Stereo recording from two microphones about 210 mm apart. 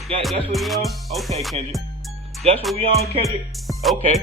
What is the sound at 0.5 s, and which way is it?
Music, centre (ahead or behind).